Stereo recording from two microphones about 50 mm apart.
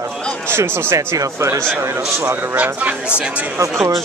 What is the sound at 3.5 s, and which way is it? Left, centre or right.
Speech, right.